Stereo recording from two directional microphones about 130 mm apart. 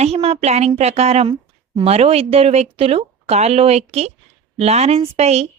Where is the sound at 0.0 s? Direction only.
50° right (ahead or behind).